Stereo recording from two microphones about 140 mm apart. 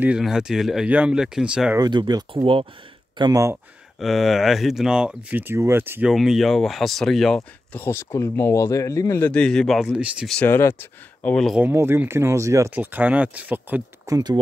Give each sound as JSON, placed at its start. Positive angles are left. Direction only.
{"t": 0.0, "sound": "speech", "side_deg": -5}
{"t": 1.8, "sound": "speech", "side_deg": -30}
{"t": 3.2, "sound": "speech", "side_deg": -25}
{"t": 4.0, "sound": "speech", "side_deg": 0}
{"t": 6.0, "sound": "speech", "side_deg": -5}
{"t": 7.8, "sound": "speech", "side_deg": 20}
{"t": 9.3, "sound": "speech", "side_deg": 5}
{"t": 10.3, "sound": "speech", "side_deg": 15}
{"t": 11.3, "sound": "speech", "side_deg": 0}
{"t": 11.6, "sound": "speech", "side_deg": -15}
{"t": 14.0, "sound": "speech", "side_deg": -25}